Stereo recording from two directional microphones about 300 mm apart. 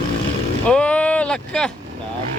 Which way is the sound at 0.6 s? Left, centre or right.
Centre.